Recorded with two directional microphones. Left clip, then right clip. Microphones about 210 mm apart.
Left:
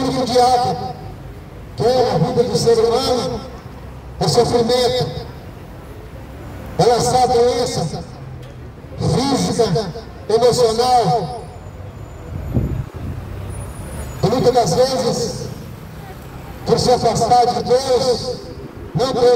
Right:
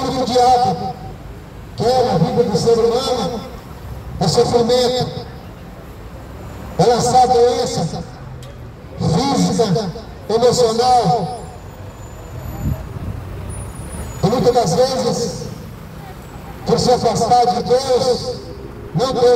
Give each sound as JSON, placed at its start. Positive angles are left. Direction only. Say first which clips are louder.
{"t": 0.0, "sound": "music", "louder": "even", "side_deg": 35}
{"t": 1.8, "sound": "speech", "louder": "even", "side_deg": 35}
{"t": 6.8, "sound": "speech", "louder": "right 2 dB", "side_deg": 35}
{"t": 14.2, "sound": "speech", "louder": "even", "side_deg": 35}
{"t": 16.6, "sound": "speech", "louder": "even", "side_deg": 35}